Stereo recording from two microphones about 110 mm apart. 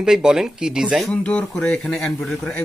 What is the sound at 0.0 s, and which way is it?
Speech, 5° right (ahead or behind).